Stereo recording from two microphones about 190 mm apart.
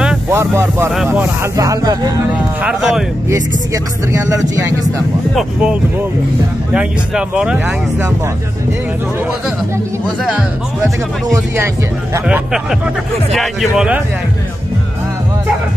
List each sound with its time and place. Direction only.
0.3 s speech: 15° right (ahead or behind)
2.3 s speech: 5° right (ahead or behind)
5.3 s speech: 5° right (ahead or behind)
10.3 s speech: 15° right (ahead or behind)
13.3 s speech: centre (ahead or behind)